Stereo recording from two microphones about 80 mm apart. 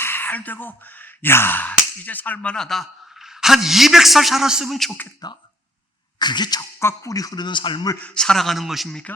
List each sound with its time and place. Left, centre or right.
0.0 s speech: left; by 4.9 s centre
5.2 s speech: left
6.7 s speech: left
8.0 s speech: centre